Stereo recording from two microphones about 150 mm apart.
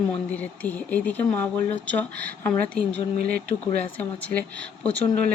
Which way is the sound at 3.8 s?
10° left (ahead or behind).